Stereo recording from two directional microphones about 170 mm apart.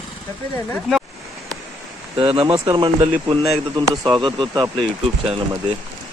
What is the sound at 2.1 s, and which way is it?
Speech, 30° right (ahead or behind).